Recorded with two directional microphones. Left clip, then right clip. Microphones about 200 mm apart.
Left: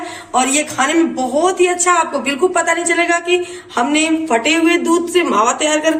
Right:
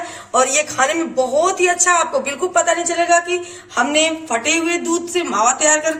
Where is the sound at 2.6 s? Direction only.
25° right (ahead or behind).